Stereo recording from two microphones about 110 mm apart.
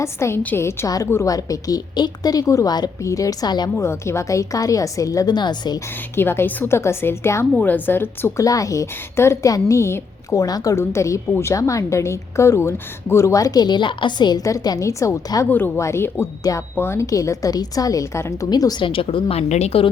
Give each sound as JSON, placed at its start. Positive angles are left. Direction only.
{"t": 0.0, "sound": "a woman's voice", "side_deg": 25}
{"t": 3.8, "sound": "a woman's voice", "side_deg": 25}
{"t": 6.1, "sound": "a woman's voice", "side_deg": 20}
{"t": 8.4, "sound": "a woman's voice", "side_deg": 30}
{"t": 15.4, "sound": "a woman's voice", "side_deg": 15}
{"t": 16.4, "sound": "a woman's voice", "side_deg": 30}
{"t": 18.5, "sound": "a woman's voice", "side_deg": 40}
{"t": 18.9, "sound": "a woman's voice", "side_deg": 50}